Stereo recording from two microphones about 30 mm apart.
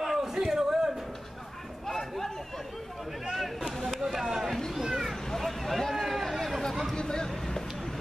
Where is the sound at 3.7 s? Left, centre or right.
Centre.